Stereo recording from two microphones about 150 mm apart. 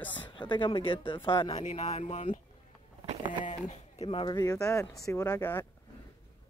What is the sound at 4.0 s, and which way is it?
Speech, 35° left (ahead or behind).